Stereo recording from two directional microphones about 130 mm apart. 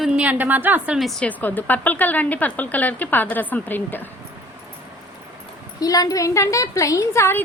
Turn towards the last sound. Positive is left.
turn(degrees=20)  # may be behind; listen again after turning